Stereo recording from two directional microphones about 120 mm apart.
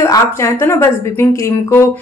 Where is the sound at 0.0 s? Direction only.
25° left (ahead or behind).